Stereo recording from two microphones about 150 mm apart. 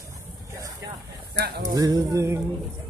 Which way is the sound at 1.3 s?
90° right.